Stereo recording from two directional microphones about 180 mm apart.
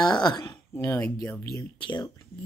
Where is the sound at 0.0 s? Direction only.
20° left (ahead or behind).